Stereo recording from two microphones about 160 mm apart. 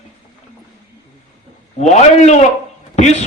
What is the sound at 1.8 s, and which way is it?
Speech, 45° left (ahead or behind).